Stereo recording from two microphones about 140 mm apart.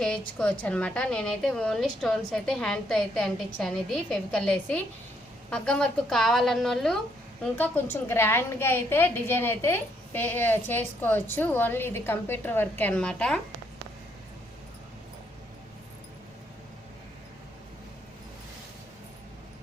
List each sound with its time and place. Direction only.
0.0 s a woman's voice: 5° left (ahead or behind)